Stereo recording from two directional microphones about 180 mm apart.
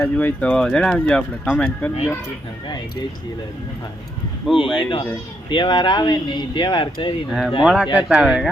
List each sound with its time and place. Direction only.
0.0 s speech: 10° left (ahead or behind)
4.8 s speech: 25° left (ahead or behind)
7.3 s speech: centre (ahead or behind)